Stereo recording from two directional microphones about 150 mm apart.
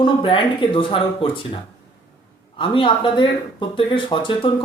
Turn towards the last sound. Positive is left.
turn(degrees=35)  # may be behind; listen again after turning